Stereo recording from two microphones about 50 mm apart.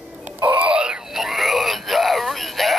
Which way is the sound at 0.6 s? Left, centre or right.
Centre.